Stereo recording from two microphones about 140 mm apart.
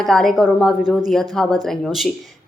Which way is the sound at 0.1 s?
5° left (ahead or behind).